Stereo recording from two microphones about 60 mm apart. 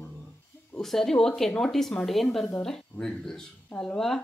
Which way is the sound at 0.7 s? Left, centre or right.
Centre.